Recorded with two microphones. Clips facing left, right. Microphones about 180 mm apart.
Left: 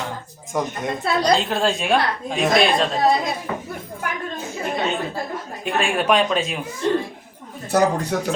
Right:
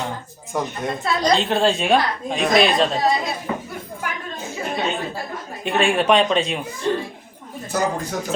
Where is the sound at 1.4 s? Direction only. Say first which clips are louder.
Right 2 dB; centre (ahead or behind).